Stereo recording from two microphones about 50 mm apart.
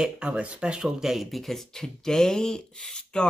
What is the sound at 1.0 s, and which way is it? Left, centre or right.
Speech, centre.